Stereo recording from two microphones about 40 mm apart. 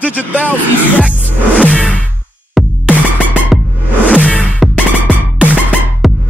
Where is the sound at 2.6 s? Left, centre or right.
Centre.